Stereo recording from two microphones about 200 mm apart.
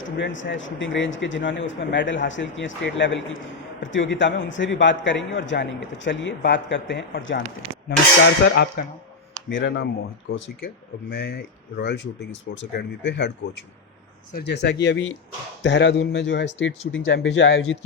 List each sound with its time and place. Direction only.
0.0 s a man's voice: 65° left (ahead or behind)
8.4 s a man's voice: 55° left (ahead or behind)
11.1 s a man's voice: 55° left (ahead or behind)